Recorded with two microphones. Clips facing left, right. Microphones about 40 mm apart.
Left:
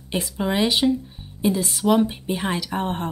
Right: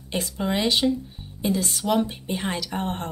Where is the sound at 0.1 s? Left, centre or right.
Centre.